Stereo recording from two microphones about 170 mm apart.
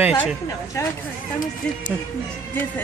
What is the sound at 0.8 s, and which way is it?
Speech, 15° left (ahead or behind).